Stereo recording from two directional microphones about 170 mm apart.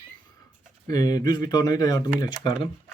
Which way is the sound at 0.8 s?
20° left (ahead or behind).